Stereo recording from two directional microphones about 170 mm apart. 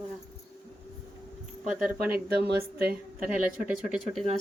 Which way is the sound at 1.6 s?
5° right (ahead or behind).